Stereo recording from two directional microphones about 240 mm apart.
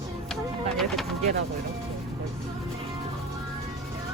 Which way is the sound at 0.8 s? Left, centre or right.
Centre.